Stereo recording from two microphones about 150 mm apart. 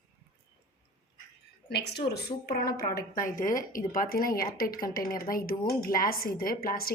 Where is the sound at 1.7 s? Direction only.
90° left.